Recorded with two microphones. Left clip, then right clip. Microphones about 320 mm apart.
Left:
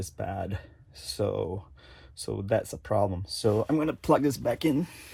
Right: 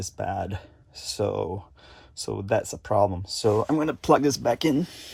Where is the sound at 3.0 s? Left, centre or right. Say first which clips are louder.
Right 6 dB; right.